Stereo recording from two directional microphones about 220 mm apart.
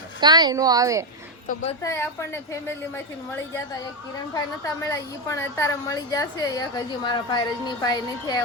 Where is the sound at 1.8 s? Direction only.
15° left (ahead or behind).